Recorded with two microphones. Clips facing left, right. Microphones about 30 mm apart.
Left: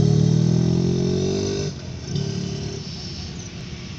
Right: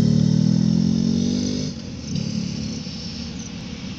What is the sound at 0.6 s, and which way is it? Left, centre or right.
Vehicle, right.